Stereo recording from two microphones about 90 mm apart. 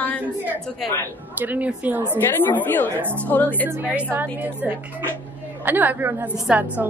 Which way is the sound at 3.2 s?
15° left (ahead or behind).